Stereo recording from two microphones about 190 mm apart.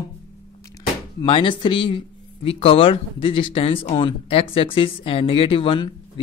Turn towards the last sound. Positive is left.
turn(degrees=30)  # may be behind; listen again after turning